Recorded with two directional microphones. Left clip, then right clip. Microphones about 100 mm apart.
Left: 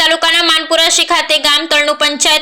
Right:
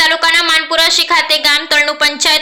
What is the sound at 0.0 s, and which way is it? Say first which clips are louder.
Speech: even; 20° left (ahead or behind).